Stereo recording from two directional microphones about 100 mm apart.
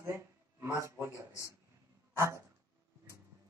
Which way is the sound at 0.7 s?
25° right (ahead or behind).